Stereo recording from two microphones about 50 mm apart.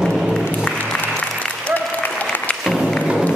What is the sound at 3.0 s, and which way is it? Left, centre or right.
Run, centre.